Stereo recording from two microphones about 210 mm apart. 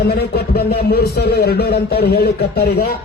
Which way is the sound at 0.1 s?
50° left (ahead or behind).